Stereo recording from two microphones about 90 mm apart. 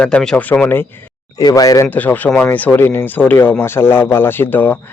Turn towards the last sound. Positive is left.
turn(degrees=20)  # may be behind; listen again after turning